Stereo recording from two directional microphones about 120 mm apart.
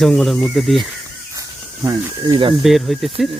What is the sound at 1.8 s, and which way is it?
Speech, 25° right (ahead or behind).